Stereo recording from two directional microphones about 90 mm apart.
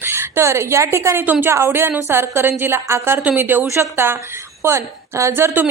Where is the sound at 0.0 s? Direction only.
25° right (ahead or behind).